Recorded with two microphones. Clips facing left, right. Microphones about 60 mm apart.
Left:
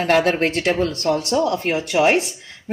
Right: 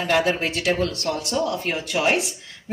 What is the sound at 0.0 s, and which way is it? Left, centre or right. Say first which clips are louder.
Speech: left 4 dB; left.